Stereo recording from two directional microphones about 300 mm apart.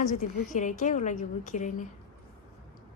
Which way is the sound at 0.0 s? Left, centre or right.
Left.